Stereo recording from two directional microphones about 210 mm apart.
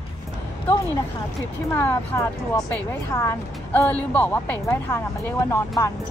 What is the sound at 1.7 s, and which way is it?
A woman's voice, 10° left (ahead or behind).